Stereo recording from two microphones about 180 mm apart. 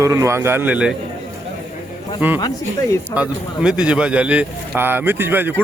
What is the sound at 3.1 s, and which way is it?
A man's voice, 5° right (ahead or behind).